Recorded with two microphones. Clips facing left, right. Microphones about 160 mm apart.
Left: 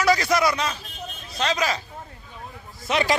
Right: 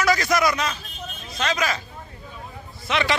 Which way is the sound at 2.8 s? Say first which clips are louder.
Left 1 dB; 40° left (ahead or behind).